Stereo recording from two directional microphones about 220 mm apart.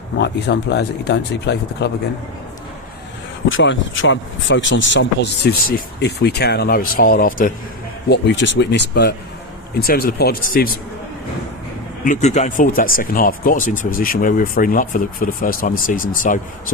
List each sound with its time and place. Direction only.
0.2 s speech: 50° left (ahead or behind)
3.5 s speech: 55° left (ahead or behind); by 7.5 s 40° left (ahead or behind)
8.1 s speech: 55° left (ahead or behind)
12.0 s speech: 30° left (ahead or behind)